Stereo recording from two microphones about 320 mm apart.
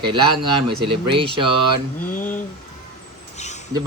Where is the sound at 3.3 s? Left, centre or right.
Left.